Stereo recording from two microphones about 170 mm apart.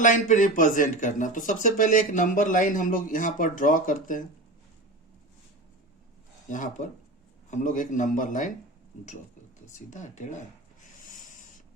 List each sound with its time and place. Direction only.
0.0 s speech: 45° left (ahead or behind)
6.5 s speech: 50° left (ahead or behind)
9.7 s speech: 45° left (ahead or behind)